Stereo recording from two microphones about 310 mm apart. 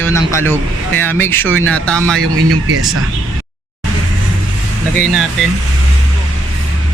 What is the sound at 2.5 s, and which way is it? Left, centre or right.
Speech, right.